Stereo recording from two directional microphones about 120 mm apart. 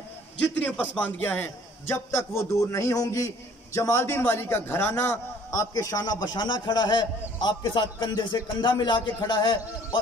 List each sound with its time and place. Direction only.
0.4 s a man's voice: 10° left (ahead or behind); by 9.6 s 40° left (ahead or behind)